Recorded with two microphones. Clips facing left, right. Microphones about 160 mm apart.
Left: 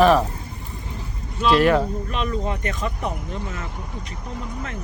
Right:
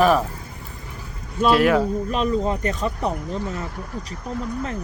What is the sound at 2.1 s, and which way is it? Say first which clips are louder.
Speech: right 4 dB; 35° right (ahead or behind).